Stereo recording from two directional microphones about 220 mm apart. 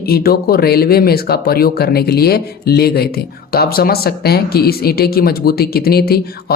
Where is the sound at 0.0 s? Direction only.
45° left (ahead or behind).